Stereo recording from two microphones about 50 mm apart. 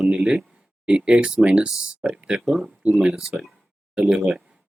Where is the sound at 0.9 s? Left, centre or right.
Centre.